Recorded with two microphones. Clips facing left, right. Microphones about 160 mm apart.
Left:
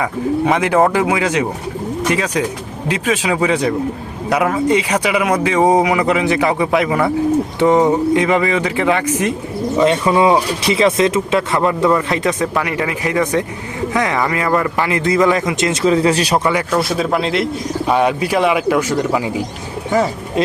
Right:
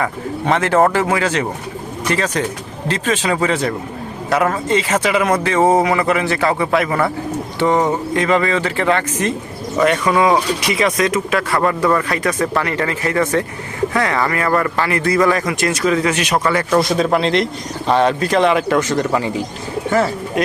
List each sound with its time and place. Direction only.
0.0 s speech: 10° left (ahead or behind)
9.8 s a man's voice: 25° left (ahead or behind)
16.4 s speech: 15° left (ahead or behind)
16.7 s speech: 5° left (ahead or behind)